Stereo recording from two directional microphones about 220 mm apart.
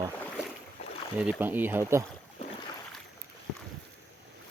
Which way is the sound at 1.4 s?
10° right (ahead or behind).